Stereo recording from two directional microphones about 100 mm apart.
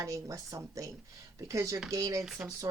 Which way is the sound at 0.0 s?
35° right (ahead or behind).